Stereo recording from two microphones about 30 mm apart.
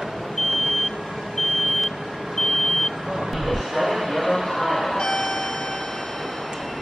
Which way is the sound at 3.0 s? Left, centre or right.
Centre.